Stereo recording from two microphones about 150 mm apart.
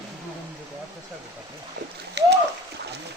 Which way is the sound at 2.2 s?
90° right.